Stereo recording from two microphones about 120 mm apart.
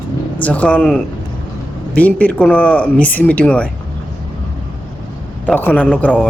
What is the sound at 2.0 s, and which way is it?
Speech, 10° left (ahead or behind).